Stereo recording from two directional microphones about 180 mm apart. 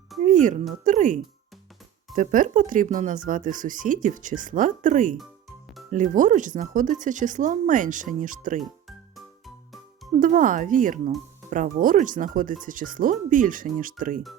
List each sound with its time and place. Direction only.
0.3 s a sound: 45° right (ahead or behind)
0.9 s speech: 45° right (ahead or behind)
10.2 s speech: 50° right (ahead or behind)